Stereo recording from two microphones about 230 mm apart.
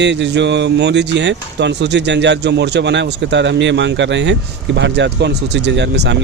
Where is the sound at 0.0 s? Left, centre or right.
Right.